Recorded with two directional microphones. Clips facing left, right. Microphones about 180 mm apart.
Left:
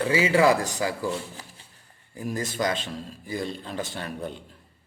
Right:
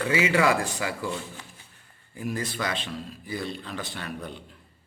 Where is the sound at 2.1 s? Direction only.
40° left (ahead or behind).